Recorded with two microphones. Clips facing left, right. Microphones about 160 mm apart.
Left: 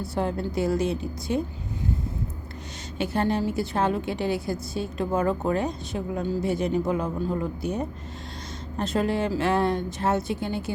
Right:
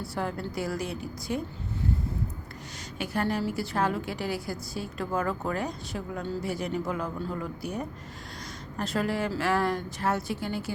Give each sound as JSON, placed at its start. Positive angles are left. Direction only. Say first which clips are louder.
{"t": 0.0, "sound": "a woman's voice", "louder": "left 5 dB", "side_deg": 20}
{"t": 3.0, "sound": "a woman's voice", "louder": "left 4 dB", "side_deg": 25}